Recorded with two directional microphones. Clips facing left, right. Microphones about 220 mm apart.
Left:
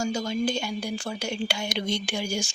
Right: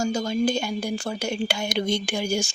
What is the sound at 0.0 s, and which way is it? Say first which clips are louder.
A woman's voice: right 3 dB; 45° right (ahead or behind).